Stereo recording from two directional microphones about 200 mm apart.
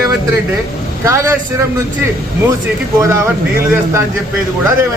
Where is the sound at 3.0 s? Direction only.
15° right (ahead or behind).